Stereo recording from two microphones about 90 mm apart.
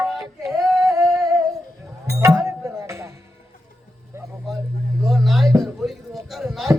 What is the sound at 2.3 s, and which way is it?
Music, 35° right (ahead or behind).